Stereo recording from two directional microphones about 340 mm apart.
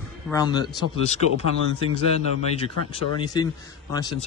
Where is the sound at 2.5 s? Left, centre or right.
Centre.